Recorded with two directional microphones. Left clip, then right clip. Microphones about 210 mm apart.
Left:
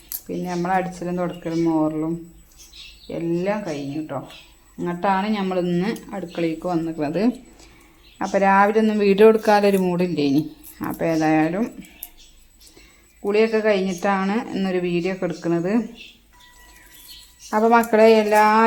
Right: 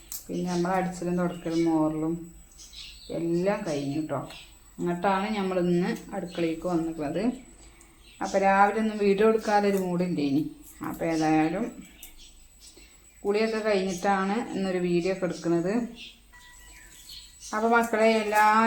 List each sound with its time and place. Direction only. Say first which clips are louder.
0.4 s speech: left 5 dB; 40° left (ahead or behind)
3.1 s speech: left 3 dB; 45° left (ahead or behind)
13.2 s speech: left 8 dB; 50° left (ahead or behind)
17.5 s speech: left 7 dB; 50° left (ahead or behind)